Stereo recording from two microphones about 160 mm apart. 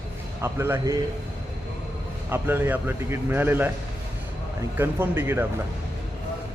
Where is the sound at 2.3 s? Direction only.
15° right (ahead or behind).